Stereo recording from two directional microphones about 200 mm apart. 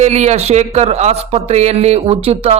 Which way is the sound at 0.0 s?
35° right (ahead or behind).